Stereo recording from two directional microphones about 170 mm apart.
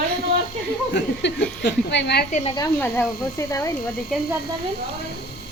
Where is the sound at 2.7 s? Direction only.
15° left (ahead or behind).